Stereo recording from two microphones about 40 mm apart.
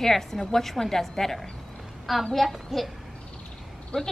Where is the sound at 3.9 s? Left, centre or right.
Left.